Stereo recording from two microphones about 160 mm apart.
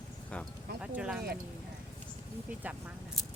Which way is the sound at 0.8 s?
5° right (ahead or behind).